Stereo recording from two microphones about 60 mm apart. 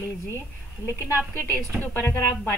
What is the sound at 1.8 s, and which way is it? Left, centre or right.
Speech, left.